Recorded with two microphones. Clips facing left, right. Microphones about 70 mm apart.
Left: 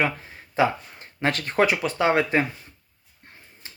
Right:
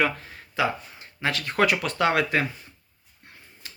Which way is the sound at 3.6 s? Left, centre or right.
Left.